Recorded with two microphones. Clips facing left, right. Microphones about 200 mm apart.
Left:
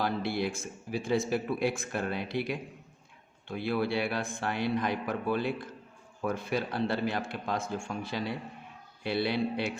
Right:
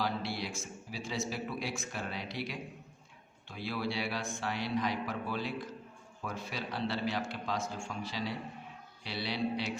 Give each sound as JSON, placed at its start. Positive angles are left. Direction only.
{"t": 0.0, "sound": "a man's voice", "side_deg": 55}